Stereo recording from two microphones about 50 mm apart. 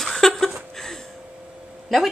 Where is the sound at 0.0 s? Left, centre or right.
Centre.